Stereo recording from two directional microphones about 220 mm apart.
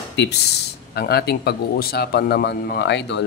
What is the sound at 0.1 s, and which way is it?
Speech, 50° left (ahead or behind).